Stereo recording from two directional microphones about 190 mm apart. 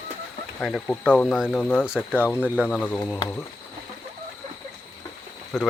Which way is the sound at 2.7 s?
5° left (ahead or behind).